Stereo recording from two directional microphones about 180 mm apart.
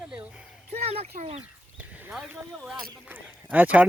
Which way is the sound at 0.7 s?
35° right (ahead or behind).